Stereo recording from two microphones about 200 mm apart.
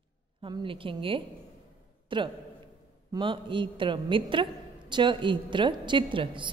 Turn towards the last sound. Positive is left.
turn(degrees=-25)  # may be behind; listen again after turning